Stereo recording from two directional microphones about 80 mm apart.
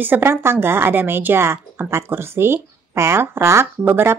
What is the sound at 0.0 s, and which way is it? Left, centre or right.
A woman's voice, right.